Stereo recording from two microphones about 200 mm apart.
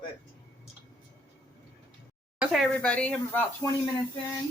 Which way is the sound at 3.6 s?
15° left (ahead or behind).